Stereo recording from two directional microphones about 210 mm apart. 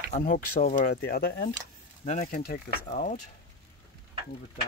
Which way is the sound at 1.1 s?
45° left (ahead or behind).